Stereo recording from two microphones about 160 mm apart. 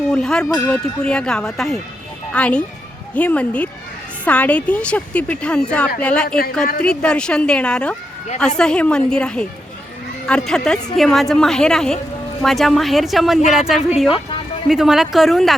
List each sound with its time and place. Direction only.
0.1 s speech: 5° left (ahead or behind)
0.4 s speech: 15° left (ahead or behind)
1.0 s speech: 5° left (ahead or behind)